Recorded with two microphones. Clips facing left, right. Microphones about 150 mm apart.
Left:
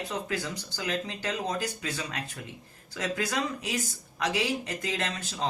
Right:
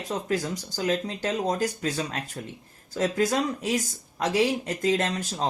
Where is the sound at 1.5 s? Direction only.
45° right (ahead or behind).